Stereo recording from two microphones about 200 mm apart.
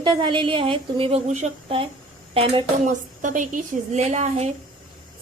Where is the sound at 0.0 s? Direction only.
25° right (ahead or behind).